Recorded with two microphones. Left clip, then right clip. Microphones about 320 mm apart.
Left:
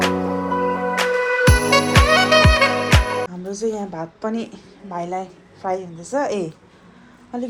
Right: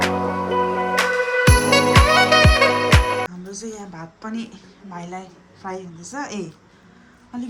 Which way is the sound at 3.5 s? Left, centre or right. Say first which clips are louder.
Left 9 dB; centre.